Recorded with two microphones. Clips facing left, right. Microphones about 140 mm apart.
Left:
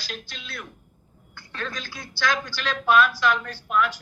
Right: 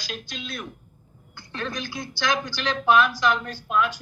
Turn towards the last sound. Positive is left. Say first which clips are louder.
# even
turn(degrees=-20)  # may be behind; listen again after turning